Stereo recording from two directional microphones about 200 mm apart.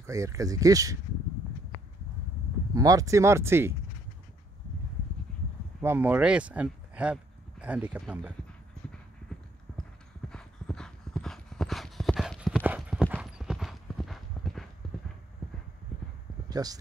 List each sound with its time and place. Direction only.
0.0 s speech: 15° right (ahead or behind)
2.7 s speech: 15° right (ahead or behind)
5.8 s speech: 10° right (ahead or behind)
9.7 s clip-clop: 5° left (ahead or behind)
16.4 s a sound: 20° right (ahead or behind)